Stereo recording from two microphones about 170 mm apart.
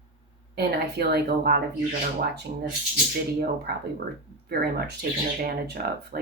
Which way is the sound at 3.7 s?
70° right (ahead or behind).